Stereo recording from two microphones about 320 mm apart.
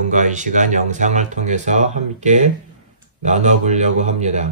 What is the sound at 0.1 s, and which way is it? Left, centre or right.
Speech, right.